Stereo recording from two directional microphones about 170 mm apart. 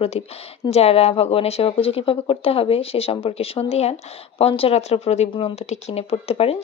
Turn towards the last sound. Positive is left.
turn(degrees=35)  # may be behind; listen again after turning